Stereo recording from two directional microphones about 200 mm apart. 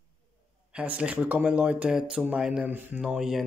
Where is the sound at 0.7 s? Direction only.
5° right (ahead or behind).